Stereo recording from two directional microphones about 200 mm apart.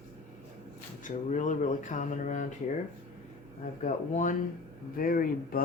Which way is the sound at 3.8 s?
40° left (ahead or behind).